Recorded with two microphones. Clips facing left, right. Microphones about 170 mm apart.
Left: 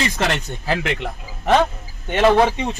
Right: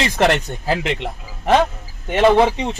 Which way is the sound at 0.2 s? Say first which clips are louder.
Right 10 dB; 60° right (ahead or behind).